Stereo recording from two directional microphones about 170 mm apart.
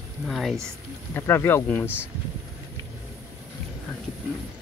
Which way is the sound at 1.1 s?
10° left (ahead or behind).